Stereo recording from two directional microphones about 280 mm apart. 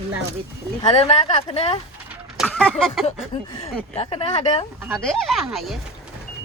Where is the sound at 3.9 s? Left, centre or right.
Left.